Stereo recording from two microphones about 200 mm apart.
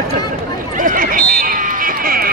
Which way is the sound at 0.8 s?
45° right (ahead or behind).